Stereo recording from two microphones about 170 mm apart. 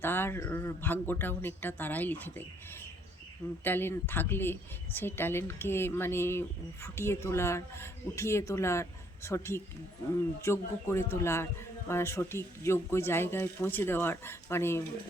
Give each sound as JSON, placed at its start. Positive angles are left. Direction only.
{"t": 0.0, "sound": "speech", "side_deg": 15}
{"t": 3.6, "sound": "speech", "side_deg": 10}